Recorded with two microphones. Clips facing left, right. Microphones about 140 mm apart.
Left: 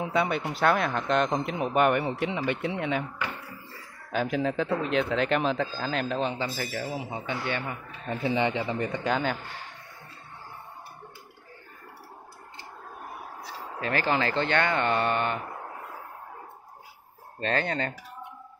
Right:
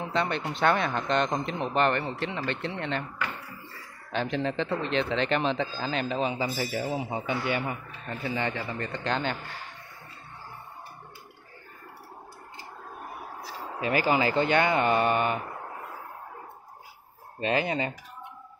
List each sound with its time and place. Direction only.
0.0 s speech: 10° left (ahead or behind); by 7.7 s 10° right (ahead or behind)
8.1 s speech: 20° left (ahead or behind)
13.7 s speech: 10° right (ahead or behind)
17.4 s speech: 10° right (ahead or behind)